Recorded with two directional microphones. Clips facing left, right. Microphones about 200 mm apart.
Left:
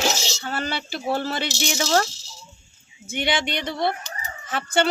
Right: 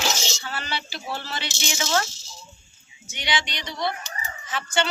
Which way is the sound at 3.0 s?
55° left (ahead or behind).